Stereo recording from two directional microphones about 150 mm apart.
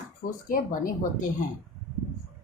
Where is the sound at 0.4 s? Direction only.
65° left (ahead or behind).